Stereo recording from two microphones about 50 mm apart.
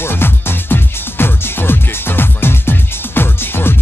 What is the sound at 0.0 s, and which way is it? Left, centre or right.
Music, left.